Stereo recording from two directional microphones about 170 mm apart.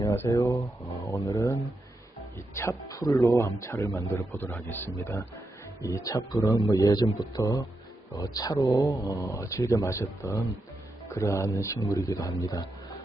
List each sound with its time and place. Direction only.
0.0 s speech: 15° left (ahead or behind)
2.6 s speech: 20° left (ahead or behind)